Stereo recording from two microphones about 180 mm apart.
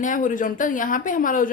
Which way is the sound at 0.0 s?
45° left (ahead or behind).